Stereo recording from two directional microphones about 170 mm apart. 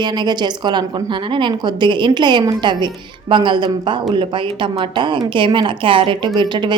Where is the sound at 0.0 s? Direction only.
25° right (ahead or behind).